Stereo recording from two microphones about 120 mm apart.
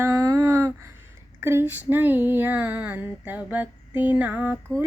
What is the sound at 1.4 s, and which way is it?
A woman's voice, 20° right (ahead or behind).